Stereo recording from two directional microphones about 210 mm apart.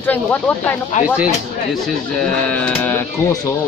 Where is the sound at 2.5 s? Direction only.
5° left (ahead or behind).